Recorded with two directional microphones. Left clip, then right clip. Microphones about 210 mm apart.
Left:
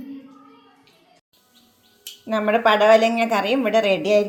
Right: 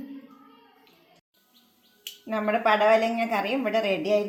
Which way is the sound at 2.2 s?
15° left (ahead or behind).